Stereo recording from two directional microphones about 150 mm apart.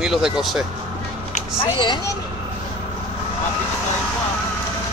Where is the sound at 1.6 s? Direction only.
30° left (ahead or behind).